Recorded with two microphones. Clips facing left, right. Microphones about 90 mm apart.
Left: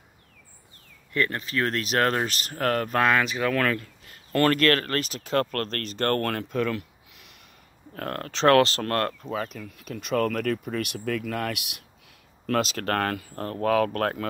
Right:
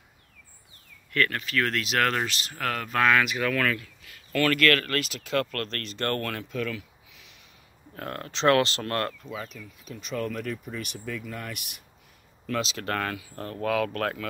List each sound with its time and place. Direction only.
1.1 s speech: 20° left (ahead or behind)
1.5 s speech: 35° left (ahead or behind)
7.9 s speech: 50° left (ahead or behind); by 11.8 s 80° left
12.4 s speech: 50° left (ahead or behind)